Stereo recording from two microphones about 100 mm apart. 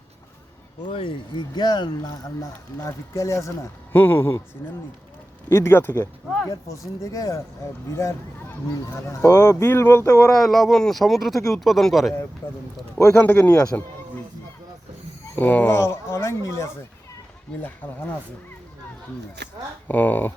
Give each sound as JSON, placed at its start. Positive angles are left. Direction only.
{"t": 0.9, "sound": "speech", "side_deg": 55}
{"t": 2.4, "sound": "speech", "side_deg": 35}
{"t": 3.9, "sound": "speech", "side_deg": 20}
{"t": 5.5, "sound": "speech", "side_deg": 25}
{"t": 6.5, "sound": "speech", "side_deg": 35}
{"t": 9.0, "sound": "speech", "side_deg": 30}
{"t": 10.1, "sound": "speech", "side_deg": 35}
{"t": 10.3, "sound": "speech", "side_deg": 0}
{"t": 11.3, "sound": "speech", "side_deg": 30}
{"t": 11.6, "sound": "speech", "side_deg": 0}
{"t": 13.0, "sound": "speech", "side_deg": 30}
{"t": 13.2, "sound": "speech", "side_deg": 15}
{"t": 15.4, "sound": "speech", "side_deg": 20}
{"t": 19.9, "sound": "speech", "side_deg": 15}